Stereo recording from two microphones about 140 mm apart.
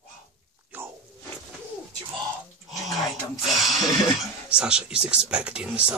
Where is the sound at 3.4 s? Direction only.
Centre (ahead or behind).